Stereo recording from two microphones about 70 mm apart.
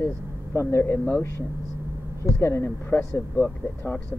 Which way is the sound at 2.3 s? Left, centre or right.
Left.